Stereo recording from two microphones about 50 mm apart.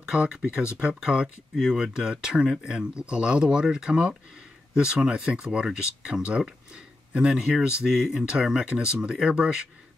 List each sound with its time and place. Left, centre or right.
0.0 s speech: centre